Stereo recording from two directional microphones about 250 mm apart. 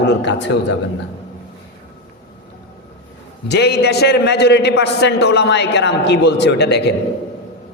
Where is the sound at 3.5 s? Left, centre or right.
Left.